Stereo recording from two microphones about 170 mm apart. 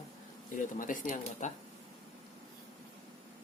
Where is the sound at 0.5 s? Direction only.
50° left (ahead or behind).